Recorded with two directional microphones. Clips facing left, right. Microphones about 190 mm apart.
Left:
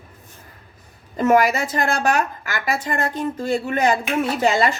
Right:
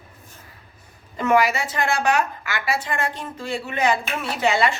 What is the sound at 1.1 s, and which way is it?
A woman's voice, 45° left (ahead or behind).